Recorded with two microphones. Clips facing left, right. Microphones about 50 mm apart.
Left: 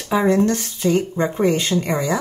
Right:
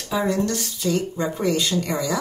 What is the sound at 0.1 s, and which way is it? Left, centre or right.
Speech, left.